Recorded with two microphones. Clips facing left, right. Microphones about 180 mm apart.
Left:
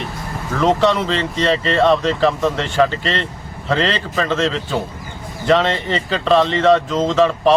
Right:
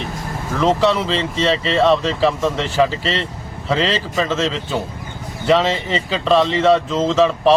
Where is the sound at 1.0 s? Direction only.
30° right (ahead or behind).